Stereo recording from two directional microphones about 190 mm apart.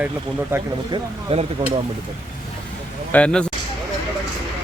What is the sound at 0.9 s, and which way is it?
Speech, 30° right (ahead or behind).